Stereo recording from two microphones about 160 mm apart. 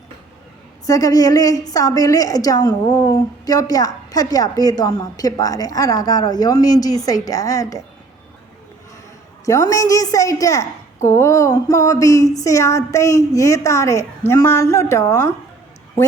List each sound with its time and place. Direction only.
0.9 s a woman's voice: 20° left (ahead or behind)
9.5 s a woman's voice: 20° left (ahead or behind)